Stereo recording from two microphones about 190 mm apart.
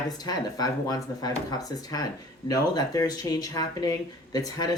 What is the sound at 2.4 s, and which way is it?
Speech, 20° left (ahead or behind).